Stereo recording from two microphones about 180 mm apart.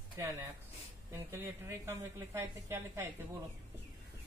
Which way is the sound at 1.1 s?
15° right (ahead or behind).